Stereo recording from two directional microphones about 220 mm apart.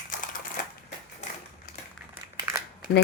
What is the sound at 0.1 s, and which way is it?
Crushing, 40° left (ahead or behind).